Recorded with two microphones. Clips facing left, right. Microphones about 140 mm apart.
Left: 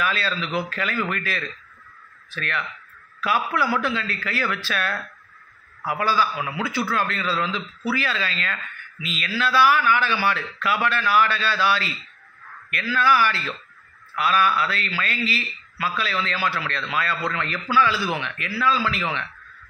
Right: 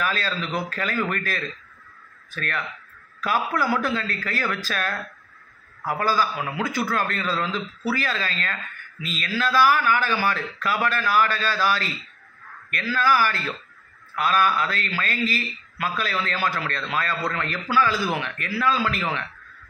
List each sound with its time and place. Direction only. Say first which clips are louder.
0.0 s a man's voice: left 1 dB; 40° right (ahead or behind)
5.9 s a man's voice: left 1 dB; 40° right (ahead or behind)